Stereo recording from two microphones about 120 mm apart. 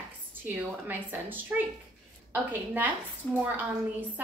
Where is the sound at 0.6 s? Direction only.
15° right (ahead or behind).